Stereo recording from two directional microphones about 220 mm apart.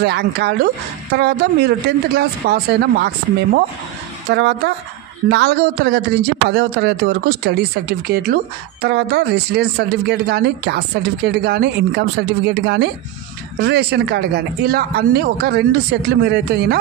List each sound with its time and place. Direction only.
0.0 s speech: 50° right (ahead or behind)
4.3 s speech: 50° right (ahead or behind)